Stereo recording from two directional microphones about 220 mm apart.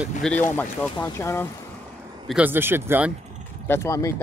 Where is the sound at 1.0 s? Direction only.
10° left (ahead or behind).